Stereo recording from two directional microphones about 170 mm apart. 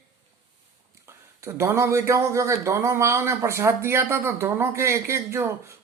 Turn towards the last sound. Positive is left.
turn(degrees=-15)  # may be behind; listen again after turning